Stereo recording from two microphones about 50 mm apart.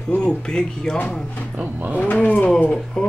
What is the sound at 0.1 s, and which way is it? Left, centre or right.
Speech, centre.